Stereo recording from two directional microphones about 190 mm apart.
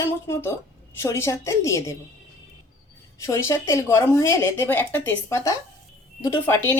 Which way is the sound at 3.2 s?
15° left (ahead or behind).